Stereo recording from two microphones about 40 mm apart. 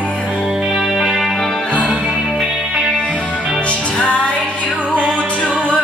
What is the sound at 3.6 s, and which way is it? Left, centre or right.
Music, left.